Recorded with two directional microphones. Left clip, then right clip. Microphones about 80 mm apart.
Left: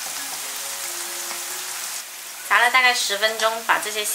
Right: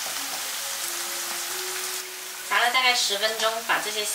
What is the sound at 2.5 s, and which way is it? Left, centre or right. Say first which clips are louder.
Speech: left 5 dB; left.